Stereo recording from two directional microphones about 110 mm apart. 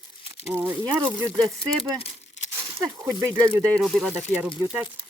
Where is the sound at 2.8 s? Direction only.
25° right (ahead or behind).